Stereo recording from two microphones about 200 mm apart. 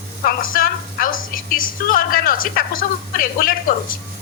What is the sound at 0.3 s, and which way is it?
A woman's voice, 45° left (ahead or behind).